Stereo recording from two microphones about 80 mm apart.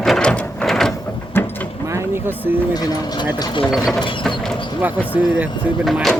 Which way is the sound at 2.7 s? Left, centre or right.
Left.